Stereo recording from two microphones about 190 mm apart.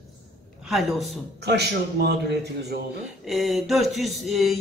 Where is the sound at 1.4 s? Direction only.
60° right (ahead or behind).